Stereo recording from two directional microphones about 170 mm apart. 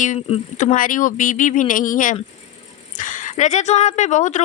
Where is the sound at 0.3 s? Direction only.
45° left (ahead or behind).